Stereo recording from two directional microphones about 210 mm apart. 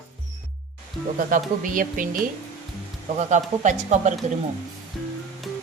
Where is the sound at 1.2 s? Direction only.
40° right (ahead or behind).